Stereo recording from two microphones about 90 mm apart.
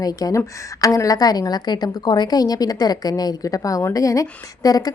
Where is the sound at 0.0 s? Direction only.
40° left (ahead or behind).